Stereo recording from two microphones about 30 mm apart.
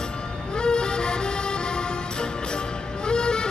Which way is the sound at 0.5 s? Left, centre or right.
Left.